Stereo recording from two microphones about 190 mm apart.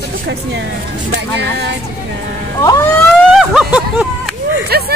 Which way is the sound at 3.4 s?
5° right (ahead or behind).